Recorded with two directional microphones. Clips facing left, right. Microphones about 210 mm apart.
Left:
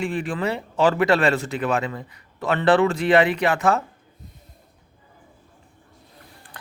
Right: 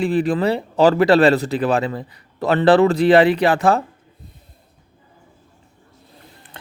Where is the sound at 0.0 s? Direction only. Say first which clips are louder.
Right 7 dB; 35° right (ahead or behind).